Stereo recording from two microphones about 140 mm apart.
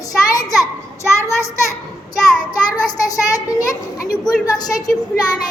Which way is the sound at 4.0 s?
25° left (ahead or behind).